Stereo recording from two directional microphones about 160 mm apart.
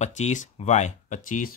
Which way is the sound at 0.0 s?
45° left (ahead or behind).